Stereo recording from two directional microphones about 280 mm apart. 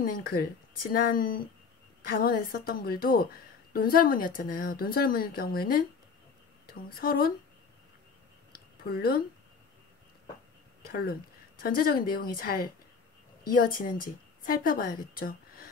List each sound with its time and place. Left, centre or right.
0.0 s a woman's voice: left
8.8 s a woman's voice: left
10.9 s a woman's voice: left